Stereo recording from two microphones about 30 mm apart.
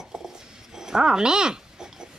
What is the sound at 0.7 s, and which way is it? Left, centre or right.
Dog, centre.